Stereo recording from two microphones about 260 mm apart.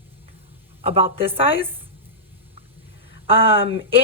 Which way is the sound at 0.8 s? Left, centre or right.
Right.